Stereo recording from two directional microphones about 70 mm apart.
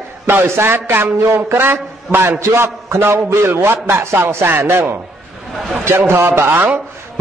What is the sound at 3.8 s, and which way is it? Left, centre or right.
A man's voice, right.